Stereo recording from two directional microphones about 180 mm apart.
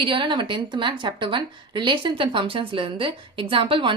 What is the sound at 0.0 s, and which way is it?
A woman's voice, 30° right (ahead or behind).